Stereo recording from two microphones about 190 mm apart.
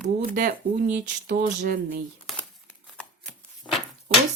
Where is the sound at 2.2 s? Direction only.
Centre (ahead or behind).